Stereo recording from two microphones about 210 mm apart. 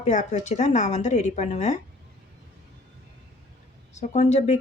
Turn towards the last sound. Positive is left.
turn(degrees=35)  # may be behind; listen again after turning